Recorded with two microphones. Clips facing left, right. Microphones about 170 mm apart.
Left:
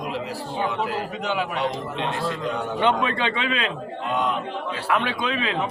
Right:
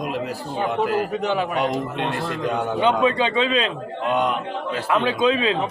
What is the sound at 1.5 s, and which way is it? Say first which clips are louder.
A man's voice: right 3 dB; 55° right (ahead or behind).